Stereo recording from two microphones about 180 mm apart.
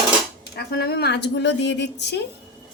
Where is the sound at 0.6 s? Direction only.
60° left (ahead or behind).